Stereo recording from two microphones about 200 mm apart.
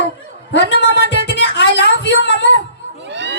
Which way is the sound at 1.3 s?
60° left (ahead or behind).